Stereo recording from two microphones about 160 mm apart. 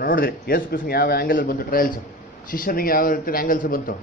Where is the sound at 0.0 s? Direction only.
65° left (ahead or behind).